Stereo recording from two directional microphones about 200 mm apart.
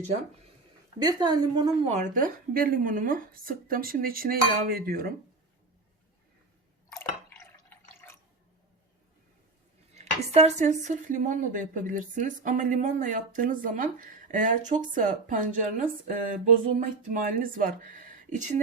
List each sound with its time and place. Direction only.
0.9 s a woman's voice: 20° right (ahead or behind); by 5.1 s 45° right (ahead or behind)
7.3 s drip: 10° left (ahead or behind)
9.9 s speech: 35° right (ahead or behind)